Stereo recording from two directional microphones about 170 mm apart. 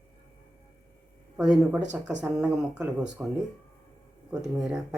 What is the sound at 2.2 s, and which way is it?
Speech, 5° right (ahead or behind).